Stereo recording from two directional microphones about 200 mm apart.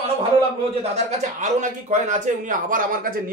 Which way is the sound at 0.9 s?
35° right (ahead or behind).